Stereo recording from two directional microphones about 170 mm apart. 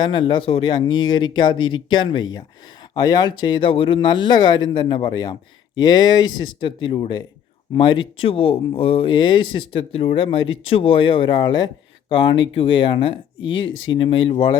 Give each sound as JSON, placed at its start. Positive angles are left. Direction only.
{"t": 0.0, "sound": "speech", "side_deg": 30}